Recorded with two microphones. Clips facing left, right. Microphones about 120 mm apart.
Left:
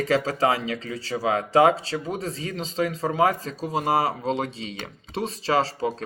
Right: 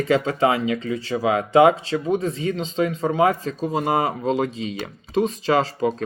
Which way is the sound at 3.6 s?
45° right (ahead or behind).